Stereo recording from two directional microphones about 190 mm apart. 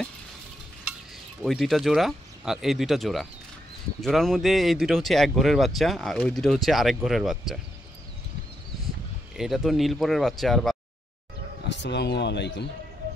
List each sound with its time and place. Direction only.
1.4 s speech: centre (ahead or behind)
9.4 s speech: centre (ahead or behind)
11.7 s a man's voice: 65° left (ahead or behind)